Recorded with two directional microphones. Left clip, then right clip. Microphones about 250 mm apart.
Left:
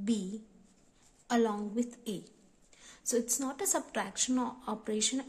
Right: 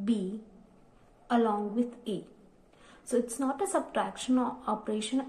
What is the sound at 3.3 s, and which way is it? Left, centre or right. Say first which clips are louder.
Speech: right 4 dB; left.